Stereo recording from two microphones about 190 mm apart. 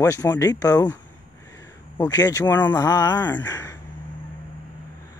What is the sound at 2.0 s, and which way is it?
Speech, 20° left (ahead or behind).